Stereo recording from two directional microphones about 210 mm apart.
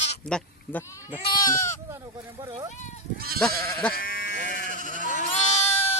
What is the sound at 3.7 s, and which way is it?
Sheep, 10° left (ahead or behind).